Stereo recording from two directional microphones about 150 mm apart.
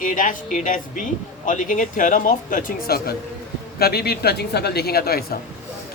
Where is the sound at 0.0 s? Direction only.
60° left (ahead or behind).